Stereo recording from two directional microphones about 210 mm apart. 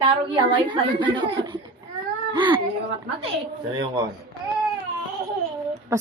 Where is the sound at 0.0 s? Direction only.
25° right (ahead or behind).